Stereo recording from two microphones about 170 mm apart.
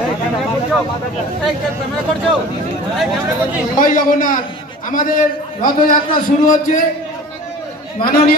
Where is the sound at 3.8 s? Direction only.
55° left (ahead or behind).